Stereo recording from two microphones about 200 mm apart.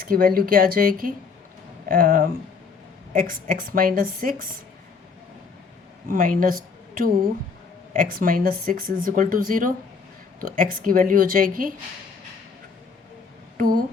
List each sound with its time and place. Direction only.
0.0 s speech: 45° right (ahead or behind)
6.1 s speech: 45° right (ahead or behind)
13.6 s speech: 45° right (ahead or behind)